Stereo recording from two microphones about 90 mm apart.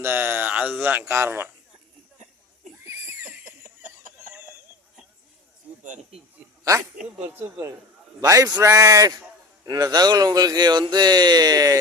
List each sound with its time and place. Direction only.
0.0 s speech: 25° right (ahead or behind)
2.7 s neigh: 30° right (ahead or behind)
3.2 s a sound: 15° right (ahead or behind)
7.2 s speech: 20° right (ahead or behind)
8.3 s a man's voice: 40° right (ahead or behind)